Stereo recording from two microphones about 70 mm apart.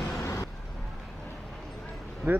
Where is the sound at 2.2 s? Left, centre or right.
Right.